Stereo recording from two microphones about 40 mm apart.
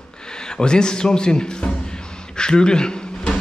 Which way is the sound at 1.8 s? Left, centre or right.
Centre.